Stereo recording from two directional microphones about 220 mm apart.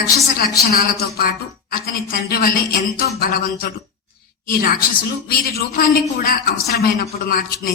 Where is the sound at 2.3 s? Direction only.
40° left (ahead or behind).